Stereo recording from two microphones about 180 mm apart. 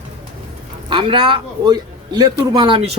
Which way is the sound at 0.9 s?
25° right (ahead or behind).